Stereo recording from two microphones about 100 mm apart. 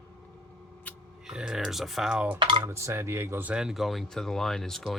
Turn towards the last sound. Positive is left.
turn(degrees=0)  # may be behind; listen again after turning